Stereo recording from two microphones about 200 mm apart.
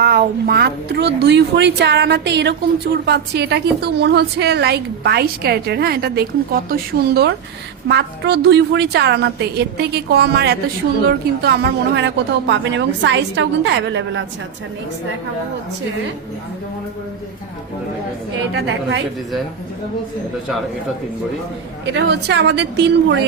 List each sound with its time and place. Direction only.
0.0 s speech: 50° right (ahead or behind)
18.5 s speech: 60° right (ahead or behind)
21.9 s speech: 60° right (ahead or behind)